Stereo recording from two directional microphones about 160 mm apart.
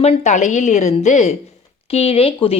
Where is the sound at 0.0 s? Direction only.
40° left (ahead or behind).